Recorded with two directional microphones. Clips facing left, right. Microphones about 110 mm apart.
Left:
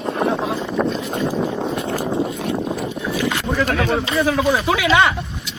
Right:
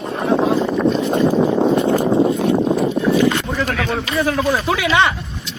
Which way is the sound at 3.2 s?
Centre (ahead or behind).